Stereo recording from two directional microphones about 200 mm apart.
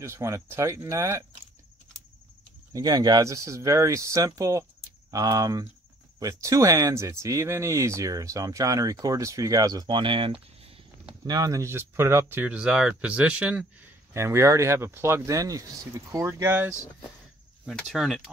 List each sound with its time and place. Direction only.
0.0 s speech: 15° right (ahead or behind)
2.7 s speech: 20° right (ahead or behind)
17.6 s speech: centre (ahead or behind)